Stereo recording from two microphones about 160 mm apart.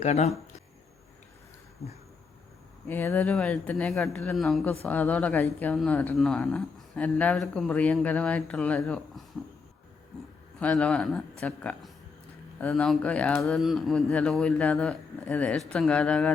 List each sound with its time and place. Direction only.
0.0 s speech: 45° left (ahead or behind)
2.8 s speech: 15° left (ahead or behind)
10.6 s speech: 5° left (ahead or behind)